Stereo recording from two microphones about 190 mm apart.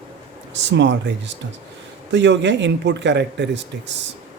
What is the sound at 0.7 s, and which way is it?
Speech, 65° right (ahead or behind).